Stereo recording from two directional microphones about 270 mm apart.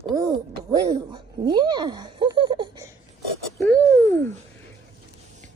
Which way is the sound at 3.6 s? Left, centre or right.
Centre.